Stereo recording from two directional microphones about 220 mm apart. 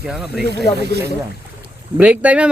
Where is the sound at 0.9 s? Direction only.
45° right (ahead or behind).